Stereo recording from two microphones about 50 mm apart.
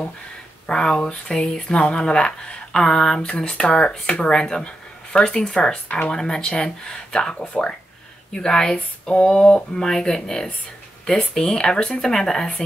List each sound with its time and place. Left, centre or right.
0.7 s speech: centre